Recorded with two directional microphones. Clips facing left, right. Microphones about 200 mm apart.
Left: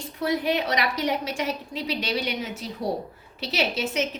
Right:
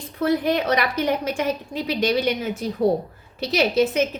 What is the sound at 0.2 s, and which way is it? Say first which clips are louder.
A woman's voice: right 4 dB; 55° right (ahead or behind).